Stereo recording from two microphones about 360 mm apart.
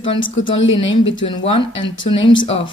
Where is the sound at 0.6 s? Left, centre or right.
Left.